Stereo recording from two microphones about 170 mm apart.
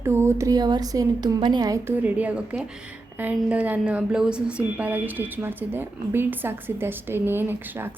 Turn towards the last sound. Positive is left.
turn(degrees=-10)  # may be behind; listen again after turning